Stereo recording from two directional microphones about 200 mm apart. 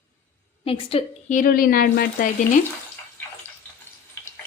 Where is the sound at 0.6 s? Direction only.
30° left (ahead or behind); by 2.3 s 45° left (ahead or behind).